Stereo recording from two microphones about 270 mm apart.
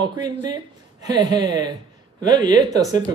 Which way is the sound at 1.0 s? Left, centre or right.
Centre.